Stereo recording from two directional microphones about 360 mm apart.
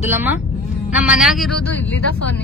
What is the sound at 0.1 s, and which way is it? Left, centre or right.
A woman's voice, centre.